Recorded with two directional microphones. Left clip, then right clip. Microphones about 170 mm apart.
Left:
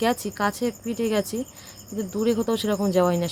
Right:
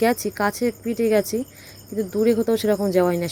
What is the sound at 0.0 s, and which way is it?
Speech, 15° right (ahead or behind).